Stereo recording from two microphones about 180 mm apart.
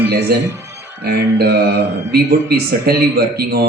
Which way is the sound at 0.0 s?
65° right (ahead or behind).